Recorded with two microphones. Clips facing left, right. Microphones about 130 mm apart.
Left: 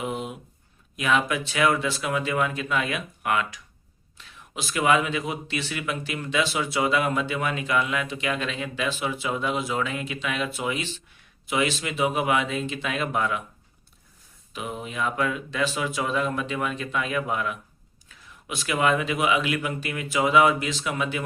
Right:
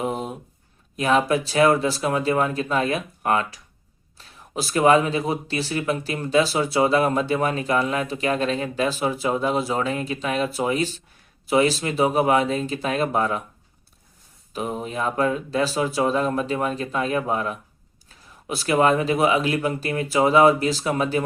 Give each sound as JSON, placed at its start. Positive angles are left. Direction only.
{"t": 0.0, "sound": "a sound", "side_deg": -40}
{"t": 0.9, "sound": "speech", "side_deg": -35}
{"t": 14.5, "sound": "speech", "side_deg": -35}